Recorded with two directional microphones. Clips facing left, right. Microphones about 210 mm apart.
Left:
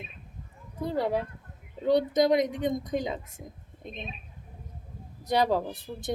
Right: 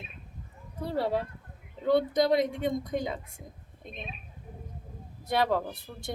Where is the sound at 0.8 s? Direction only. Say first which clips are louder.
Left 1 dB; 20° left (ahead or behind).